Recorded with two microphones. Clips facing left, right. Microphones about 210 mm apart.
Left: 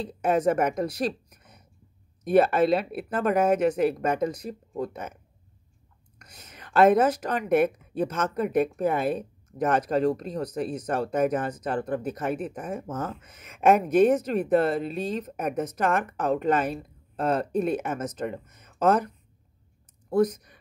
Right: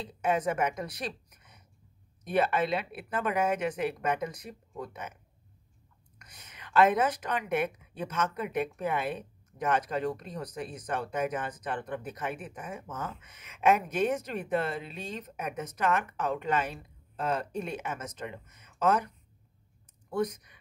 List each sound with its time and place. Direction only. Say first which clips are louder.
0.0 s a woman's voice: left 6 dB; 40° left (ahead or behind)
1.3 s a sound: left 6 dB; 45° left (ahead or behind)
2.2 s speech: left 8 dB; 45° left (ahead or behind)
6.5 s a woman's voice: left 5 dB; 45° left (ahead or behind)